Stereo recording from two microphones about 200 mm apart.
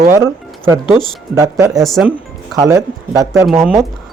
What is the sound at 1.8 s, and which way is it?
Speech, centre (ahead or behind).